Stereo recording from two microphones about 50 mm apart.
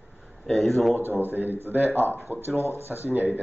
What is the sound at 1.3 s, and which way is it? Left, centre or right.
Speech, right.